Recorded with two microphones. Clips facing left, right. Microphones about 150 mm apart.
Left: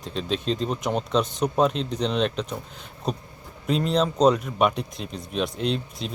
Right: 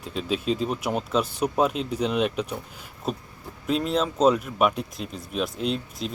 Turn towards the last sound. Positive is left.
turn(degrees=-5)  # may be behind; listen again after turning